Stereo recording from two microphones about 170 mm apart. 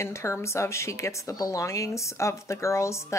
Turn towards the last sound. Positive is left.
turn(degrees=15)  # may be behind; listen again after turning